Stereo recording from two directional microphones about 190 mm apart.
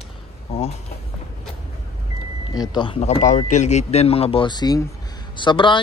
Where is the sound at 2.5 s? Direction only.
20° left (ahead or behind).